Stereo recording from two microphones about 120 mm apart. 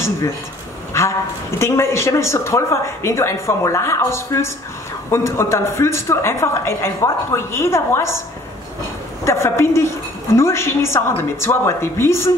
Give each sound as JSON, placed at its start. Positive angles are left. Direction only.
{"t": 1.6, "sound": "a woman's voice", "side_deg": 20}
{"t": 9.2, "sound": "a woman's voice", "side_deg": 20}